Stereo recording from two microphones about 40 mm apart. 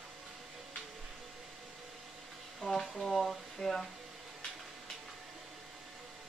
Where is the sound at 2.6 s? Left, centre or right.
Centre.